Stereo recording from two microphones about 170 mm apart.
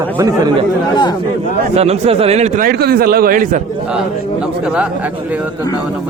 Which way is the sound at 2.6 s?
65° right (ahead or behind).